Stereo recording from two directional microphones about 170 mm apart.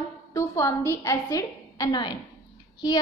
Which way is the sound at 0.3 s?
15° left (ahead or behind).